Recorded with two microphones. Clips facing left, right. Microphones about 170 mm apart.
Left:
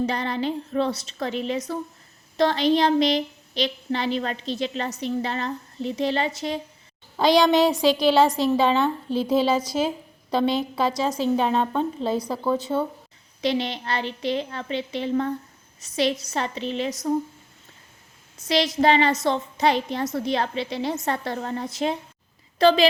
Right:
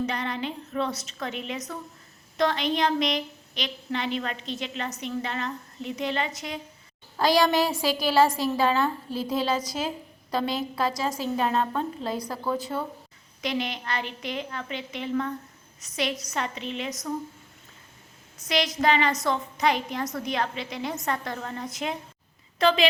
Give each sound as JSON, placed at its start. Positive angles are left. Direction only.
{"t": 0.0, "sound": "a woman's voice", "side_deg": 35}
{"t": 7.3, "sound": "a woman's voice", "side_deg": -5}
{"t": 7.5, "sound": "a woman's voice", "side_deg": 20}
{"t": 9.3, "sound": "a woman's voice", "side_deg": 0}
{"t": 10.3, "sound": "a woman's voice", "side_deg": 25}
{"t": 10.8, "sound": "a woman's voice", "side_deg": 0}
{"t": 13.4, "sound": "a woman's voice", "side_deg": 30}
{"t": 18.4, "sound": "a woman's voice", "side_deg": 30}